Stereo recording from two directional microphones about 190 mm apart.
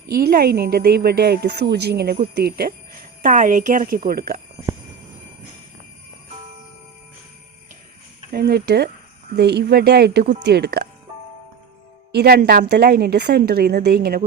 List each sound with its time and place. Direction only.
0.1 s a woman's voice: 50° right (ahead or behind)
3.2 s a woman's voice: 40° right (ahead or behind)
8.3 s a woman's voice: 55° right (ahead or behind)
12.1 s a woman's voice: 55° right (ahead or behind)